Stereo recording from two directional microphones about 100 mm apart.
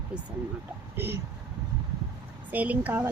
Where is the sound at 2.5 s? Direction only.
15° right (ahead or behind).